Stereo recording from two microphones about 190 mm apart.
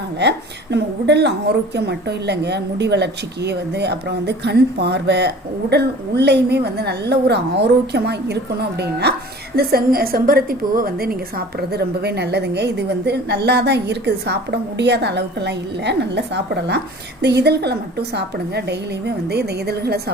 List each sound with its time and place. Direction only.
0.2 s a woman's voice: 60° right (ahead or behind)